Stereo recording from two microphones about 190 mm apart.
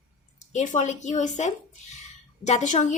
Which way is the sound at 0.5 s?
40° left (ahead or behind).